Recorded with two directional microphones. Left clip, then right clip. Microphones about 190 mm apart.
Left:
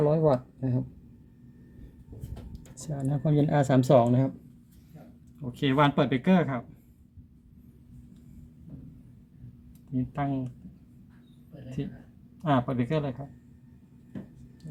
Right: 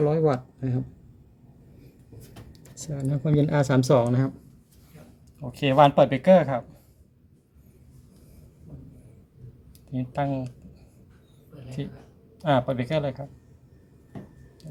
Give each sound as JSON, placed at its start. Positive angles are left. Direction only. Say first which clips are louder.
{"t": 0.0, "sound": "speech", "louder": "right 1 dB", "side_deg": 0}
{"t": 2.7, "sound": "speech", "louder": "right 2 dB", "side_deg": -5}
{"t": 5.6, "sound": "speech", "louder": "right 7 dB", "side_deg": -15}
{"t": 9.9, "sound": "speech", "louder": "right 4 dB", "side_deg": -10}
{"t": 12.4, "sound": "speech", "louder": "right 4 dB", "side_deg": -5}